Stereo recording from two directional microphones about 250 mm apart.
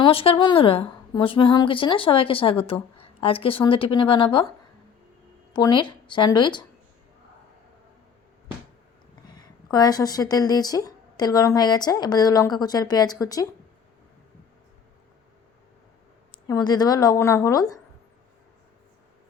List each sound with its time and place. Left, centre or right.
0.0 s a woman's voice: left
5.5 s speech: centre
9.3 s speech: centre
16.5 s speech: centre